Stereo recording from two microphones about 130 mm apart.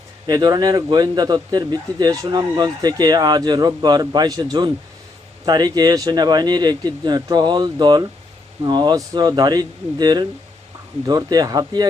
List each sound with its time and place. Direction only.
0.3 s a man's voice: 30° right (ahead or behind)